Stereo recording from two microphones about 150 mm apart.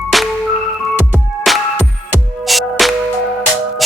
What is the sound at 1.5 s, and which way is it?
Music, centre (ahead or behind).